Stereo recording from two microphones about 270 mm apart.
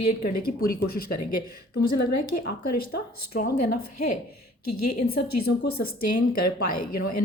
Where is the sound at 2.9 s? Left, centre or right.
Left.